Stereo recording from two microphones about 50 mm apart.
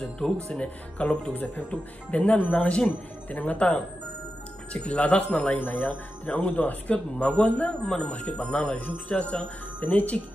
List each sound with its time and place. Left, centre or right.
0.5 s speech: left